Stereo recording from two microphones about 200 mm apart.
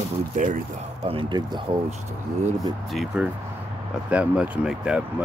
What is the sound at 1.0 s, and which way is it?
Speech, 25° right (ahead or behind).